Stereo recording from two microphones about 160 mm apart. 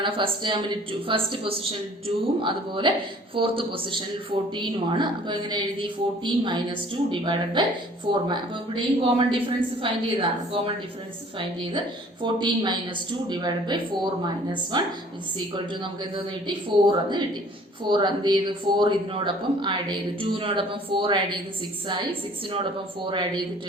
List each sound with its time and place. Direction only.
0.0 s speech: 30° right (ahead or behind)
12.2 s speech: 30° right (ahead or behind)
23.0 s speech: 30° right (ahead or behind)